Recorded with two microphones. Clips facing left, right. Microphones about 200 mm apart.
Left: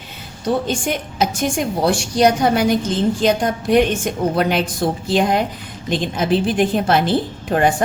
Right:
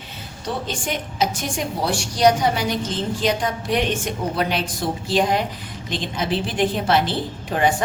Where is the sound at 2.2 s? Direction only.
50° left (ahead or behind).